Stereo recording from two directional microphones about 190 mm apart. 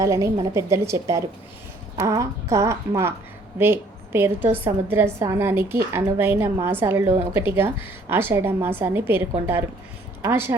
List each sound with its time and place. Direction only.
0.0 s a woman's voice: 15° right (ahead or behind)
10.2 s a woman's voice: 10° right (ahead or behind)